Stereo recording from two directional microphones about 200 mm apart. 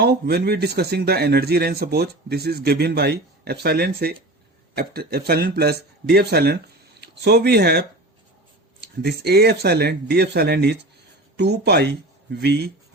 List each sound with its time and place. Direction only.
0.0 s speech: 55° right (ahead or behind)
9.0 s speech: 55° right (ahead or behind)